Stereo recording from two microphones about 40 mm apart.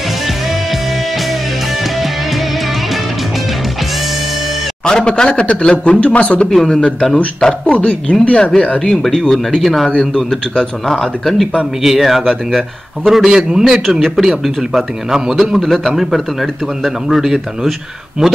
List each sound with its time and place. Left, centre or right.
4.8 s a man's voice: left
6.5 s speech: centre
7.6 s a man's voice: left
9.0 s speech: centre
9.8 s a man's voice: left
10.9 s speech: centre
11.8 s speech: centre
13.3 s a man's voice: centre
13.8 s a man's voice: centre
15.5 s a man's voice: centre